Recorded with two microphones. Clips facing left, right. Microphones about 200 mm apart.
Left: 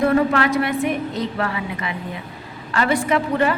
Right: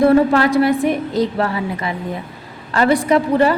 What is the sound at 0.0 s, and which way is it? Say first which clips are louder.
A woman's voice: right 5 dB; 35° right (ahead or behind).